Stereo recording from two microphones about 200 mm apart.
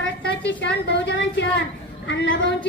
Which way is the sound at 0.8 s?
60° left (ahead or behind).